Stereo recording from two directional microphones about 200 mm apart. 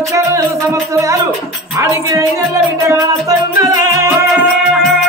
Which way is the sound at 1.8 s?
15° right (ahead or behind).